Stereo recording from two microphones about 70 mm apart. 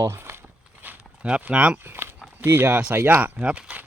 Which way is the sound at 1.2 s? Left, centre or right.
Centre.